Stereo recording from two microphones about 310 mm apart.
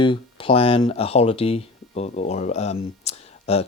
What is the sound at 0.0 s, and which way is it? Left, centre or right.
Speech, centre.